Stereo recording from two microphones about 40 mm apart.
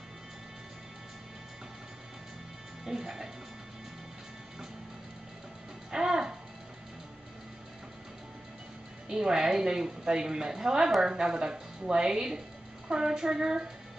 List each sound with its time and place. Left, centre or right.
2.8 s speech: centre
5.9 s music: centre
9.1 s a woman's voice: centre